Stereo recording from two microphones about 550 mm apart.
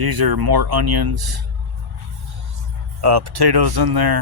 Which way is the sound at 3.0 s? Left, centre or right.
Right.